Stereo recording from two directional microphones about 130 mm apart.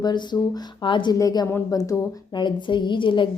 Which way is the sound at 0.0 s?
35° left (ahead or behind).